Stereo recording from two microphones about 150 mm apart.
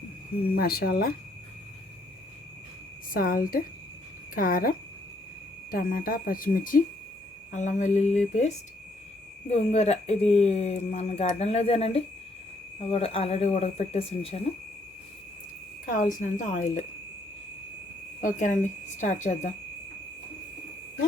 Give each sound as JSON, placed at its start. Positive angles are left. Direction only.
{"t": 0.5, "sound": "speech", "side_deg": 90}
{"t": 3.1, "sound": "speech", "side_deg": 70}
{"t": 5.7, "sound": "speech", "side_deg": 75}
{"t": 7.5, "sound": "speech", "side_deg": 55}
{"t": 16.0, "sound": "speech", "side_deg": 60}
{"t": 18.2, "sound": "speech", "side_deg": 55}